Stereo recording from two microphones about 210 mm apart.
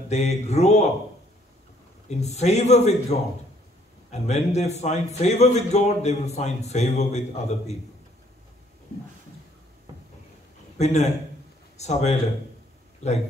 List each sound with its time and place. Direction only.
0.1 s a man's voice: 30° left (ahead or behind)
2.0 s a man's voice: 30° left (ahead or behind)
10.8 s a man's voice: 30° left (ahead or behind)